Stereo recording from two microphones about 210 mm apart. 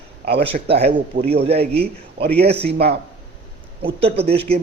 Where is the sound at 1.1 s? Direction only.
45° right (ahead or behind).